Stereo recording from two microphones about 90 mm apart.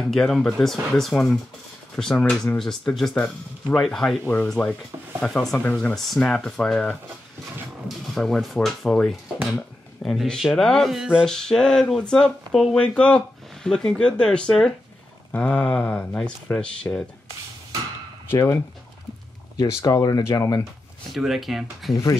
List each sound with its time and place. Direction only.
0.1 s speech: 5° left (ahead or behind)
5.6 s speech: 15° left (ahead or behind)
5.9 s speech: 5° left (ahead or behind)
8.1 s speech: 5° left (ahead or behind)
11.2 s speech: 5° left (ahead or behind)
18.3 s speech: 30° left (ahead or behind)
19.8 s speech: 45° left (ahead or behind)
21.1 s speech: centre (ahead or behind)